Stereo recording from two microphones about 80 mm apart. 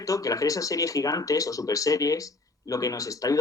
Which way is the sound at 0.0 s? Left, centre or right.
Left.